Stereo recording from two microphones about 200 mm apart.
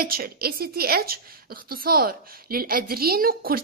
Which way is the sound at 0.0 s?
50° right (ahead or behind).